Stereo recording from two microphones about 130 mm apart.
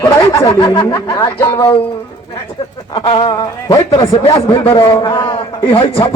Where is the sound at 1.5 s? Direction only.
45° left (ahead or behind).